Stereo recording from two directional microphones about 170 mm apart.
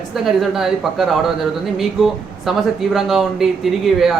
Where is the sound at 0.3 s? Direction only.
Centre (ahead or behind).